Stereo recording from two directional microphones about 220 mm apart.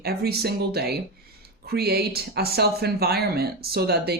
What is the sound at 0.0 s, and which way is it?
Speech, 45° right (ahead or behind).